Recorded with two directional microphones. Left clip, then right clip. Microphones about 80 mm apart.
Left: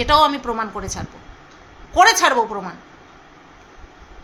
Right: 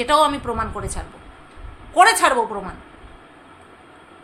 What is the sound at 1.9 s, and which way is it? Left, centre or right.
Speech, left.